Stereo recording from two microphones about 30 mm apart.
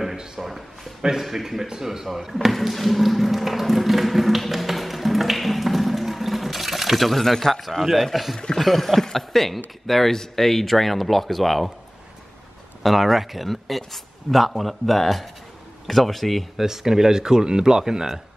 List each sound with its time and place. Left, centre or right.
0.4 s a sound: centre
2.0 s speech: centre
2.7 s tap: centre
7.8 s speech: centre
12.8 s speech: centre
16.5 s speech: centre